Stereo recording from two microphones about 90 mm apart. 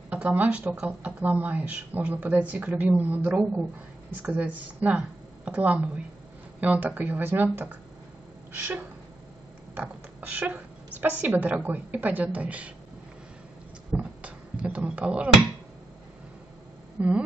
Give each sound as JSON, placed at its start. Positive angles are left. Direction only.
{"t": 0.1, "sound": "speech", "side_deg": -15}
{"t": 9.8, "sound": "a woman's voice", "side_deg": -20}
{"t": 13.9, "sound": "a sound", "side_deg": -15}
{"t": 17.0, "sound": "speech", "side_deg": -15}